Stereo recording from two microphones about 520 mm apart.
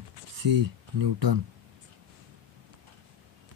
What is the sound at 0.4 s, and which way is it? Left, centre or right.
Speech, right.